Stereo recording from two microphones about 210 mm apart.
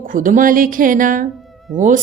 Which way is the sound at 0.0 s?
40° right (ahead or behind).